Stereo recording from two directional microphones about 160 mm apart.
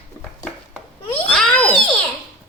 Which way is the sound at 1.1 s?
5° left (ahead or behind).